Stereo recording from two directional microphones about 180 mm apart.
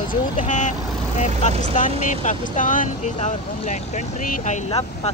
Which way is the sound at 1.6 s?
45° left (ahead or behind).